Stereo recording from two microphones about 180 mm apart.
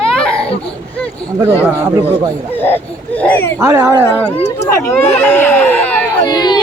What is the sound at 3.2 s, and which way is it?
Speech, 10° left (ahead or behind).